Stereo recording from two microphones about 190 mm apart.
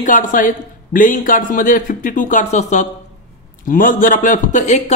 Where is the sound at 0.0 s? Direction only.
45° left (ahead or behind).